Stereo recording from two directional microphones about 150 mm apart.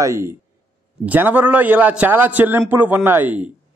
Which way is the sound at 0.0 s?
20° right (ahead or behind).